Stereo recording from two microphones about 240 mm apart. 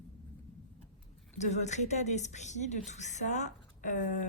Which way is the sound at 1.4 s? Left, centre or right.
Left.